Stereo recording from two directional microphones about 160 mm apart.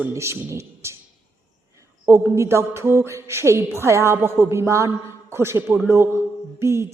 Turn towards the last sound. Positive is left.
turn(degrees=-15)  # may be behind; listen again after turning